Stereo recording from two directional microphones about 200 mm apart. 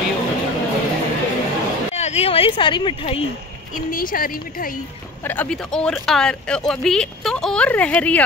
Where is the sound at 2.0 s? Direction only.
30° left (ahead or behind).